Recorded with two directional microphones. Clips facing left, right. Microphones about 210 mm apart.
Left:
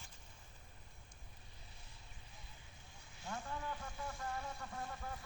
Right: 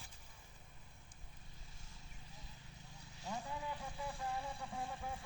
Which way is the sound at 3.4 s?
15° right (ahead or behind).